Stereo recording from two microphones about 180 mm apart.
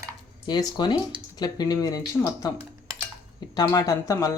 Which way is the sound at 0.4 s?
20° left (ahead or behind).